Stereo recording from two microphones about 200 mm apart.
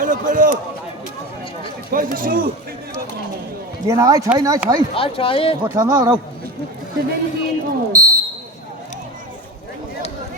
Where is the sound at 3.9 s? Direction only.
15° right (ahead or behind).